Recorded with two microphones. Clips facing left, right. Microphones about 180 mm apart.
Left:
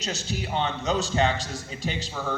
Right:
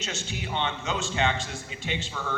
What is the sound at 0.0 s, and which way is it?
A man's voice, 35° left (ahead or behind).